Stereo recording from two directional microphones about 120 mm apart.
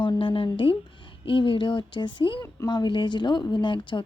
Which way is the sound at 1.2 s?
45° left (ahead or behind).